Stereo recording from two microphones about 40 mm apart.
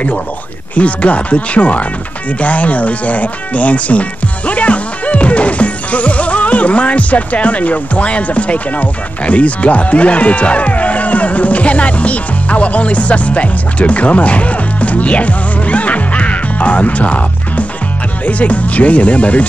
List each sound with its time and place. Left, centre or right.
0.7 s speech: left
4.5 s music: left
18.2 s speech: left